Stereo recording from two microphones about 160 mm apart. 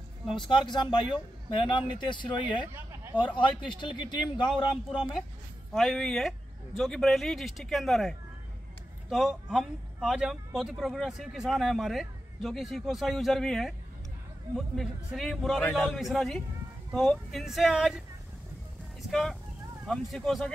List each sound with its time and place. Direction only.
0.3 s speech: 30° left (ahead or behind)
2.4 s speech: 15° right (ahead or behind)
3.3 s speech: 30° left (ahead or behind)
4.9 s speech: centre (ahead or behind)
19.0 s speech: 5° left (ahead or behind)